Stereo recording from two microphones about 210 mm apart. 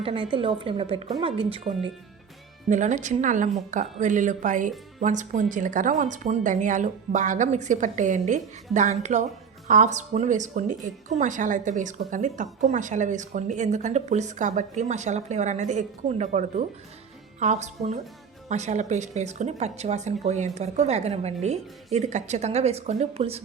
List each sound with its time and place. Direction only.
0.0 s a woman's voice: 25° right (ahead or behind)
2.6 s a woman's voice: 35° right (ahead or behind)